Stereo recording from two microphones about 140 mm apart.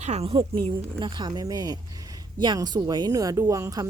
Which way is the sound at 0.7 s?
35° right (ahead or behind).